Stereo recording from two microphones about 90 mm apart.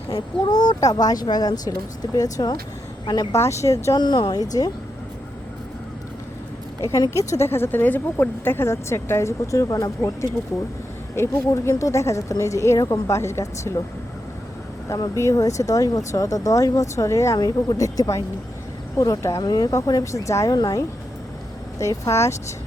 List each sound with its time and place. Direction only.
0.1 s speech: 50° left (ahead or behind)
3.3 s a woman's voice: 30° left (ahead or behind)
3.9 s speech: 55° left (ahead or behind)
7.1 s a woman's voice: 35° left (ahead or behind)
14.8 s a woman's voice: 40° left (ahead or behind)